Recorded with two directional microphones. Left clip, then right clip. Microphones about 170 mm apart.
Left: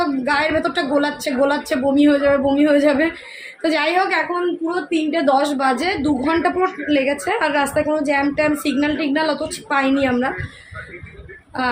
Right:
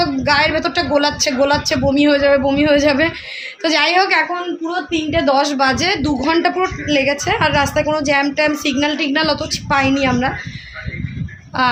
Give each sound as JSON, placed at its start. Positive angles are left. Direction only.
{"t": 0.0, "sound": "a woman's voice", "side_deg": -15}